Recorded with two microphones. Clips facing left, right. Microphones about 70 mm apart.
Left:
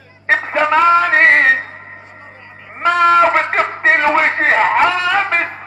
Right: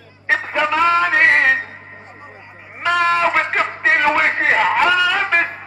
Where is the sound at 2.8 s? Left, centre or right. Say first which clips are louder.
Left 5 dB; left.